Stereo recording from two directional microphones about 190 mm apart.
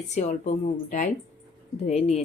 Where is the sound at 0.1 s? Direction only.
35° left (ahead or behind).